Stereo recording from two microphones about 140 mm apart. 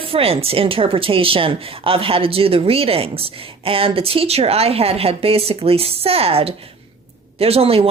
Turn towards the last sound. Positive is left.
turn(degrees=-45)  # may be behind; listen again after turning